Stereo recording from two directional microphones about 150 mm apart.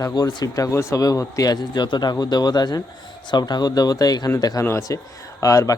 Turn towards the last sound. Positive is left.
turn(degrees=20)  # may be behind; listen again after turning